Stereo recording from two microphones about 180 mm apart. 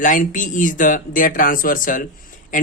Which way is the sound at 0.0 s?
45° left (ahead or behind).